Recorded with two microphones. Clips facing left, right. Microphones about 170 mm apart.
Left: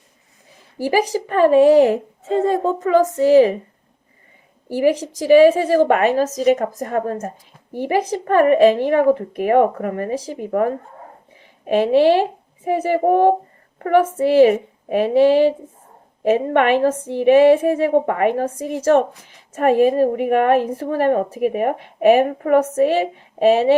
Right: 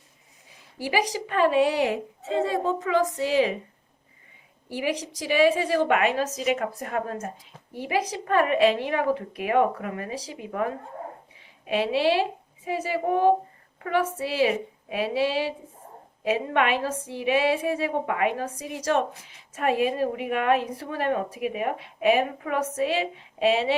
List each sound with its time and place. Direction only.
0.8 s a woman's voice: 45° left (ahead or behind)
4.7 s a woman's voice: 45° left (ahead or behind)